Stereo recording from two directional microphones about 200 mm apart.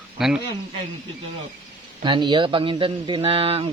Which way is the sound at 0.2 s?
Centre (ahead or behind).